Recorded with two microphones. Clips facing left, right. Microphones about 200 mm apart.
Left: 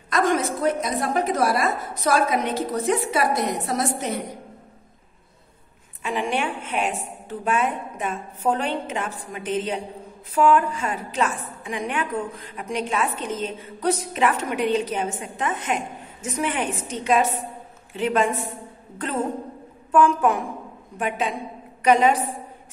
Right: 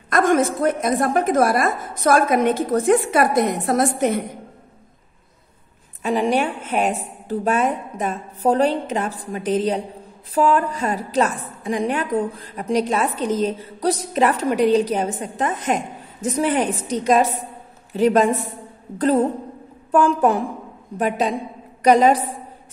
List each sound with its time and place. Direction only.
0.1 s a woman's voice: 50° right (ahead or behind)
6.0 s a woman's voice: 40° right (ahead or behind)